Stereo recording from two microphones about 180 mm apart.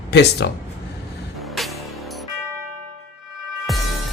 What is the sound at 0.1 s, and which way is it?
Speech, 65° left (ahead or behind).